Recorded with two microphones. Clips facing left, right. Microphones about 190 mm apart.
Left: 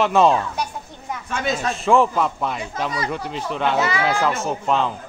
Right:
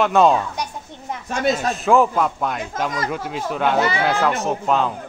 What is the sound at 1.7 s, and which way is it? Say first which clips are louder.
Speech: left 1 dB; centre (ahead or behind).